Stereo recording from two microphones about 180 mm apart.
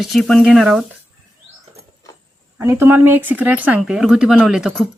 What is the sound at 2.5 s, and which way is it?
Speech, 15° right (ahead or behind).